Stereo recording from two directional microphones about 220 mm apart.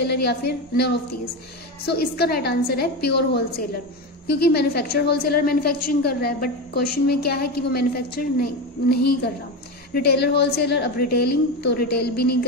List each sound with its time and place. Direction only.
0.0 s a woman's voice: 50° left (ahead or behind)